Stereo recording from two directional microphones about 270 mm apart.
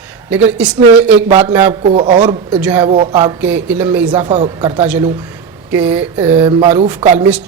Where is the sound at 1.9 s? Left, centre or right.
Centre.